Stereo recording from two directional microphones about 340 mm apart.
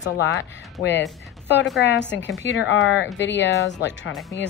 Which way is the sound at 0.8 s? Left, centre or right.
Left.